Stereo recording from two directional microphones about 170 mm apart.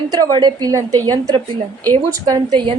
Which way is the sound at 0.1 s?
25° right (ahead or behind).